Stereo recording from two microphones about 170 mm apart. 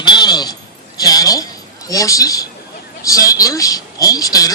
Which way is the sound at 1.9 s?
20° left (ahead or behind).